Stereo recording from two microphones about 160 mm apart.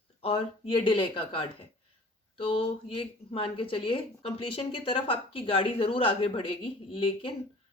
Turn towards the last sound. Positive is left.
turn(degrees=35)  # may be behind; listen again after turning